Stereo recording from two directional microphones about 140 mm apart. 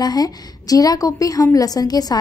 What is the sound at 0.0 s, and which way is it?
Speech, 30° left (ahead or behind).